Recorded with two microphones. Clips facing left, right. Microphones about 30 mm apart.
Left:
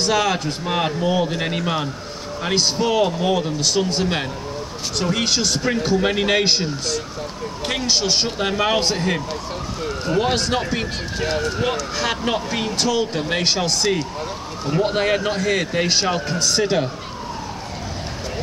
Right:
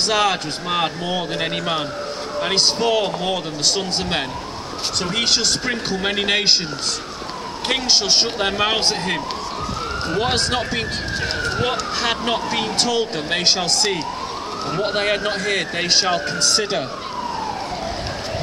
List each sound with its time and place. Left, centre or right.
0.0 s speech: right
0.7 s speech: centre
5.9 s speech: centre
11.2 s speech: right
12.0 s a sound: right
12.3 s speech: centre
14.7 s speech: centre